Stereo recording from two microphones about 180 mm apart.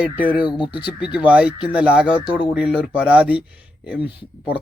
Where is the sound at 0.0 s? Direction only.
10° right (ahead or behind).